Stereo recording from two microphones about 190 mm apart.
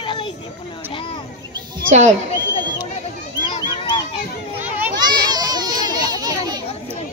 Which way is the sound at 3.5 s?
25° left (ahead or behind).